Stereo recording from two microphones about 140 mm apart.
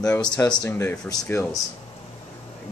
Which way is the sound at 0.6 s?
20° left (ahead or behind).